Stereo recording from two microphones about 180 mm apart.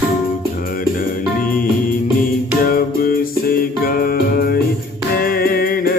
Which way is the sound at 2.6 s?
55° left (ahead or behind).